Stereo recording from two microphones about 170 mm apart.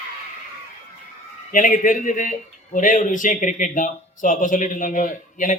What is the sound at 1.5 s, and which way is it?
Speech, 50° left (ahead or behind).